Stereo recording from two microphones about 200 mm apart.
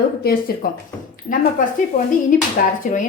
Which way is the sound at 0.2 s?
50° left (ahead or behind).